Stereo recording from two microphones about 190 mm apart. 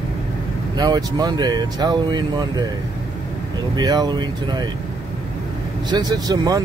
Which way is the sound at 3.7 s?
20° right (ahead or behind).